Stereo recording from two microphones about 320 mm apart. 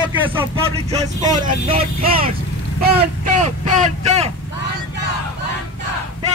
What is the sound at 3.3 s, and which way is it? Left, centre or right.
Speech, right.